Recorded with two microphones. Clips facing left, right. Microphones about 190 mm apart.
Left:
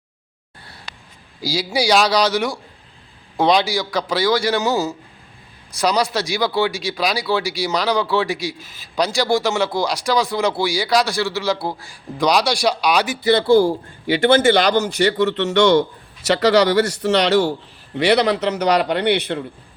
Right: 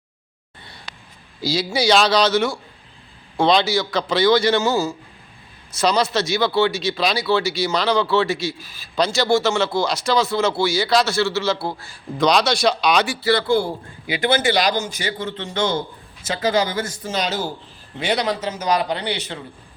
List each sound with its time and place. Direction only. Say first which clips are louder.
1.4 s speech: even; 10° left (ahead or behind)
14.2 s a man's voice: left 5 dB; 50° left (ahead or behind)